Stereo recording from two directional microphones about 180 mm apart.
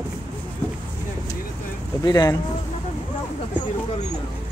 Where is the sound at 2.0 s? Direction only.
20° left (ahead or behind).